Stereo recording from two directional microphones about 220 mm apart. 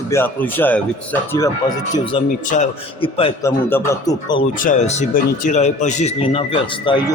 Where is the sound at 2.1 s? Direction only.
30° left (ahead or behind).